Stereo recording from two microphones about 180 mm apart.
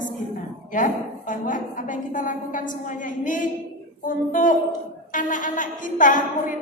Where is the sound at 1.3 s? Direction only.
45° left (ahead or behind).